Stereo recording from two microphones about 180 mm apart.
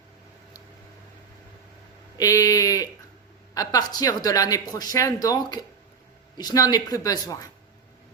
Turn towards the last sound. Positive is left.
turn(degrees=20)  # may be behind; listen again after turning